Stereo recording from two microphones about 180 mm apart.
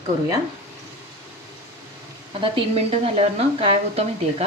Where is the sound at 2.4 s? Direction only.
30° right (ahead or behind).